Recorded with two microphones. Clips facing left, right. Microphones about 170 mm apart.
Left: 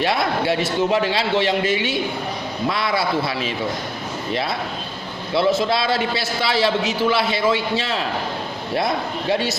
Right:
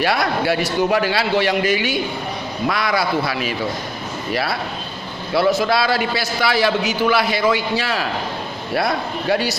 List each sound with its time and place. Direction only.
0.0 s a man's voice: 25° left (ahead or behind)
9.3 s a man's voice: 25° left (ahead or behind)